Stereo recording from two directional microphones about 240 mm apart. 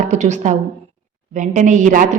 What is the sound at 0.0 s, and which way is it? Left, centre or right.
A woman's voice, right.